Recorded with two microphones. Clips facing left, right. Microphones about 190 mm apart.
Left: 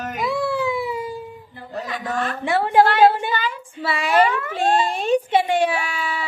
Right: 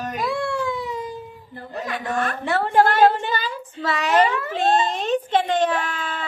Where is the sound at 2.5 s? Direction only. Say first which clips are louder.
Left 2 dB; 10° left (ahead or behind).